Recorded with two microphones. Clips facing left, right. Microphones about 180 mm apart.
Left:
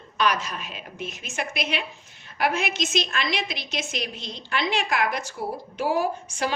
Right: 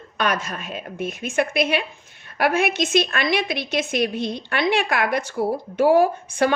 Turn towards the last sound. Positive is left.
turn(degrees=-55)  # may be behind; listen again after turning